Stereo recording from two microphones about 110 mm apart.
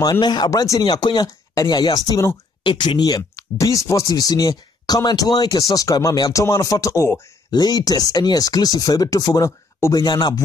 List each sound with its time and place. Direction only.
0.1 s speech: 40° left (ahead or behind)
2.6 s speech: 45° left (ahead or behind); by 10.0 s 25° left (ahead or behind)
10.0 s speech: 40° left (ahead or behind)